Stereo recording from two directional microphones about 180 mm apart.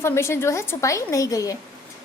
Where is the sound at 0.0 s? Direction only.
15° left (ahead or behind).